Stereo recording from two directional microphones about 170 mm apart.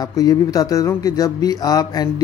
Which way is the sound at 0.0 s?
20° left (ahead or behind).